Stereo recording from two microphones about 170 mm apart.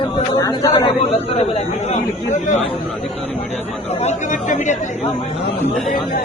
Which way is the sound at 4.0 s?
45° left (ahead or behind).